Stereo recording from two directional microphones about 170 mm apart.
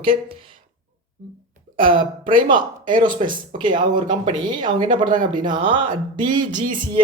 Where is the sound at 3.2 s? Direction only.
40° right (ahead or behind).